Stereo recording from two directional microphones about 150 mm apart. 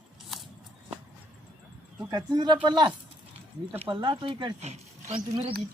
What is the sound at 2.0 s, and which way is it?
Speech, 25° right (ahead or behind).